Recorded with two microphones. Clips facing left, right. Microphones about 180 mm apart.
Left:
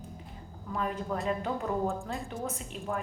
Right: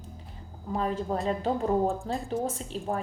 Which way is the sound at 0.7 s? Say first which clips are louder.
Right 4 dB; 30° right (ahead or behind).